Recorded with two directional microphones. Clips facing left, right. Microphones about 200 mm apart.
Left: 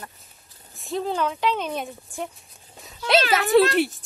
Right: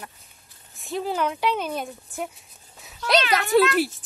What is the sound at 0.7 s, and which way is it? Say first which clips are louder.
Speech: left 1 dB; centre (ahead or behind).